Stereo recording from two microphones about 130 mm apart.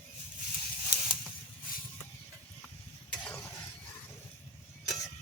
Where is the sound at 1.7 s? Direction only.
90° left.